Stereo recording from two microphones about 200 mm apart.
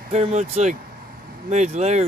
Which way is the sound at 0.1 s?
35° right (ahead or behind).